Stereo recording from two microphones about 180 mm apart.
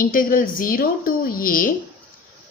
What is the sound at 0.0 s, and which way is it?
A woman's voice, 50° left (ahead or behind).